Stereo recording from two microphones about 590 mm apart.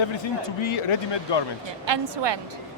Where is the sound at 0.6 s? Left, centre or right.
Left.